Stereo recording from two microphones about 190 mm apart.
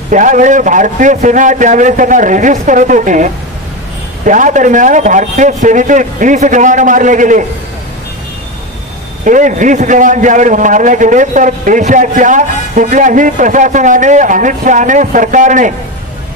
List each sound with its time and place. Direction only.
0.1 s a man's voice: 40° right (ahead or behind)
4.3 s a man's voice: 40° right (ahead or behind)
9.2 s a man's voice: 40° right (ahead or behind)